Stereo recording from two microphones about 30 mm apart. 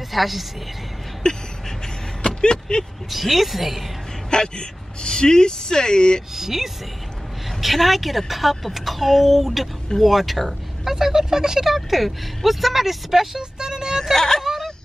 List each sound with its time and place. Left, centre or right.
0.1 s a woman's voice: centre
1.2 s a sound: left
2.2 s vehicle: left
3.1 s a woman's voice: centre
4.3 s speech: left
6.3 s a woman's voice: centre
10.9 s speech: centre
11.6 s a woman's voice: centre
13.4 s speech: right
14.1 s speech: centre